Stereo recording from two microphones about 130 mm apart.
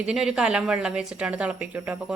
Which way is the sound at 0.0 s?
5° right (ahead or behind).